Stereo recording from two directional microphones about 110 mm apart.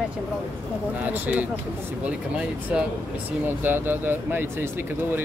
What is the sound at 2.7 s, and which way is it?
Speech, 10° right (ahead or behind).